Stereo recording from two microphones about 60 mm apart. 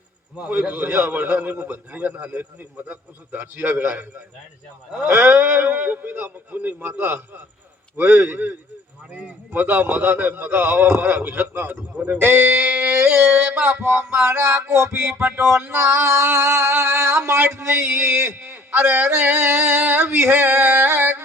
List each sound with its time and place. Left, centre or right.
0.3 s a man's voice: right
5.0 s a man's voice: right